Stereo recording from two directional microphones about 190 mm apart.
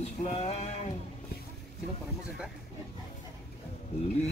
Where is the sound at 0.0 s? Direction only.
35° left (ahead or behind).